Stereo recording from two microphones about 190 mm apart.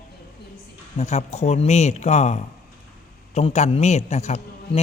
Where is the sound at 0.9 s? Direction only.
35° left (ahead or behind).